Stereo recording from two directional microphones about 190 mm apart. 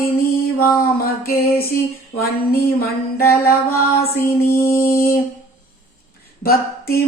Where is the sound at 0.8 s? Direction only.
50° left (ahead or behind).